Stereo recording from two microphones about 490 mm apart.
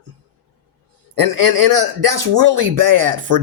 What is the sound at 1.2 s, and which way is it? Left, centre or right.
Speech, right.